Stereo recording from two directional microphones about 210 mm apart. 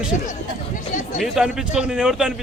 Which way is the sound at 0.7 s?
35° left (ahead or behind).